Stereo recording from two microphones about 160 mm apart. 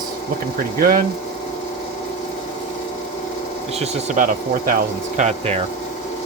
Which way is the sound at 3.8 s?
45° right (ahead or behind).